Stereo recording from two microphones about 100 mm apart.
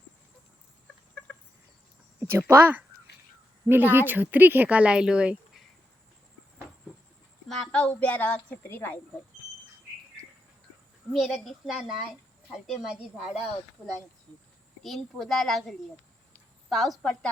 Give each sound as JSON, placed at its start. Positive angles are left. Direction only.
{"t": 2.2, "sound": "speech", "side_deg": -25}
{"t": 7.4, "sound": "a child's voice", "side_deg": 5}
{"t": 11.1, "sound": "speech", "side_deg": 0}
{"t": 13.8, "sound": "speech", "side_deg": 20}
{"t": 14.8, "sound": "speech", "side_deg": 0}